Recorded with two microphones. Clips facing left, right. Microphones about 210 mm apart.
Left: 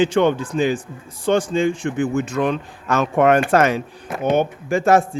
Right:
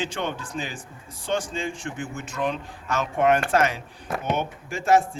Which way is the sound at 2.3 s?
60° left (ahead or behind).